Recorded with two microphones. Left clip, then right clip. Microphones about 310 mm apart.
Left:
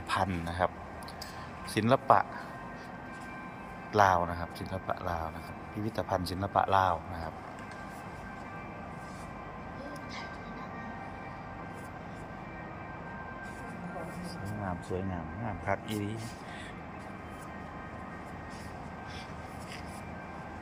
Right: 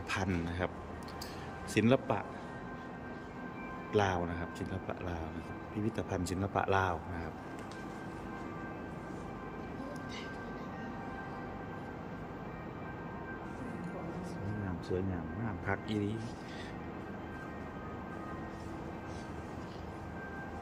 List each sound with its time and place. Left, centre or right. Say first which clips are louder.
0.1 s a man's voice: left 5 dB; centre
1.7 s speech: left 6 dB; centre
3.9 s a man's voice: left 7 dB; centre
15.6 s a man's voice: left 2 dB; centre